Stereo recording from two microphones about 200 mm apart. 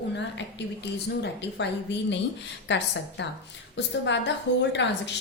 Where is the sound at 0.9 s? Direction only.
60° left (ahead or behind).